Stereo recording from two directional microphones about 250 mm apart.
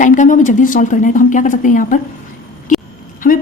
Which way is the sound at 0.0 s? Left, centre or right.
Left.